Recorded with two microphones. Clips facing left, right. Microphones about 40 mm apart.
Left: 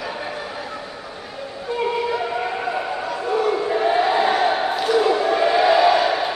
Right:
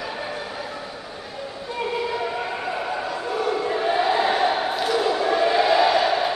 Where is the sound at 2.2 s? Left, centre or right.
Centre.